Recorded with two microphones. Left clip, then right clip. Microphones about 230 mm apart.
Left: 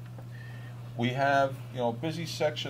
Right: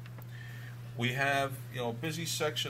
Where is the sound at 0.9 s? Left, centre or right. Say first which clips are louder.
Left 5 dB; right.